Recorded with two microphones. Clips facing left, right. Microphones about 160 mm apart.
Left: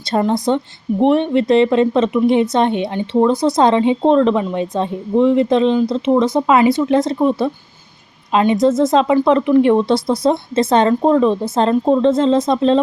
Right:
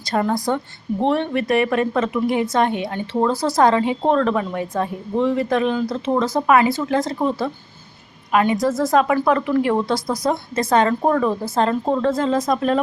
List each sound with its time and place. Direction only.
0.0 s a woman's voice: 25° left (ahead or behind)